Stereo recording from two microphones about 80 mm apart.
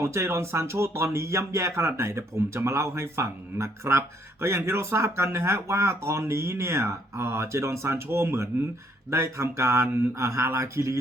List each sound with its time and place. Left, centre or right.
0.0 s speech: right